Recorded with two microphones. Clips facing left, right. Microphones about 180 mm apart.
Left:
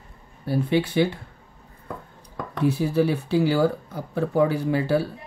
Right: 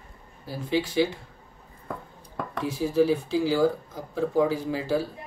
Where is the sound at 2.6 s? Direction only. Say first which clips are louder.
Left 2 dB; 65° left (ahead or behind).